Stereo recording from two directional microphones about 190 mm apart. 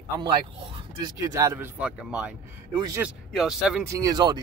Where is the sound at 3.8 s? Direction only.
15° right (ahead or behind).